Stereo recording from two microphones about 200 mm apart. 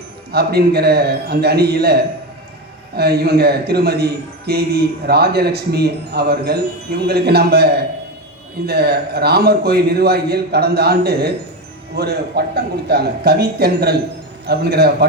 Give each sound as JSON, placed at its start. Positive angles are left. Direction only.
{"t": 0.3, "sound": "a man's voice", "side_deg": -50}